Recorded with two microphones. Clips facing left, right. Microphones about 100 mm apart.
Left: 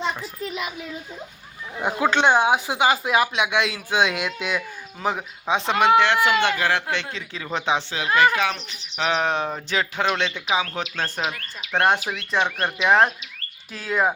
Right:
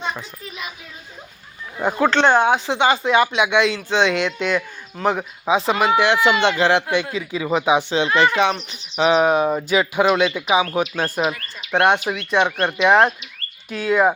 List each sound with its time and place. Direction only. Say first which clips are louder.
2.0 s speech: right 3 dB; 10° left (ahead or behind)
6.2 s speech: right 4 dB; 25° right (ahead or behind)
6.9 s speech: right 7 dB; 10° right (ahead or behind)
7.9 s speech: right 3 dB; 25° right (ahead or behind); by 14.1 s centre (ahead or behind)